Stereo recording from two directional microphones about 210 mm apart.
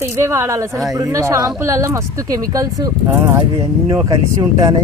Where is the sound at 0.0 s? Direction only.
15° right (ahead or behind).